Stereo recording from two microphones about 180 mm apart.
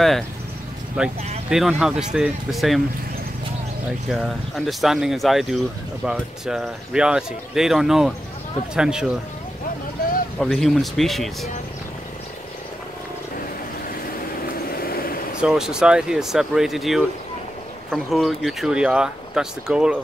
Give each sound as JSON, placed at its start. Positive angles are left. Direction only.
{"t": 1.0, "sound": "speech", "side_deg": -5}
{"t": 4.1, "sound": "speech", "side_deg": 0}
{"t": 10.4, "sound": "speech", "side_deg": 0}
{"t": 14.7, "sound": "vehicle", "side_deg": 55}
{"t": 15.4, "sound": "speech", "side_deg": -5}